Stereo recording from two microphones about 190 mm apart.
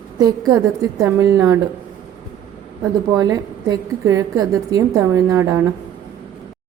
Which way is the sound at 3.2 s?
20° right (ahead or behind).